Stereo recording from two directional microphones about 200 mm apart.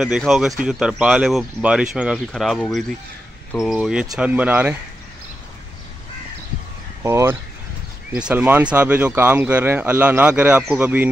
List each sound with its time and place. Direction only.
0.0 s speech: centre (ahead or behind)
7.0 s speech: 15° right (ahead or behind)